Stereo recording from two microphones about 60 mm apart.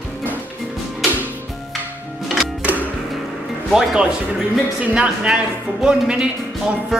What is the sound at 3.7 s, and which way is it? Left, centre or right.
Speech, centre.